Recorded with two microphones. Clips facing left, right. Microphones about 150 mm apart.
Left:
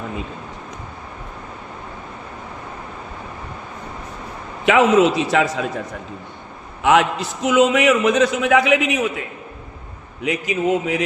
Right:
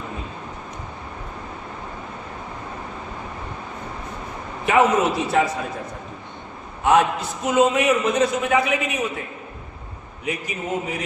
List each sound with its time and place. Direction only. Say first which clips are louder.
4.6 s a man's voice: left 4 dB; 90° left
6.8 s a man's voice: left 2 dB; 90° left
10.2 s a man's voice: left 8 dB; 90° left